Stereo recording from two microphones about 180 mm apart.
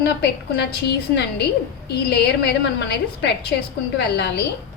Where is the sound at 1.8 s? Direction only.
65° left (ahead or behind).